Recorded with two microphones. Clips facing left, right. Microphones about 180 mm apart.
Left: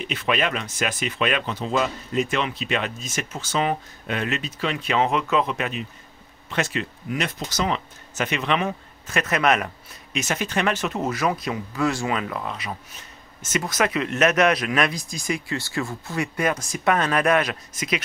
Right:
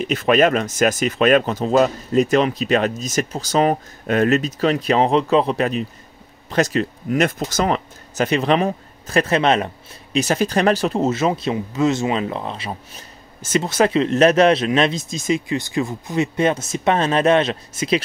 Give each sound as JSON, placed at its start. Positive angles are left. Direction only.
{"t": 0.0, "sound": "speech", "side_deg": -45}